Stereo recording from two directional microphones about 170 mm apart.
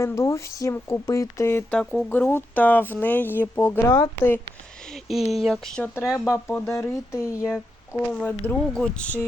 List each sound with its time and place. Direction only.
0.0 s speech: 15° left (ahead or behind)
4.9 s a sound: centre (ahead or behind)
5.3 s speech: centre (ahead or behind)
6.0 s speech: 15° left (ahead or behind)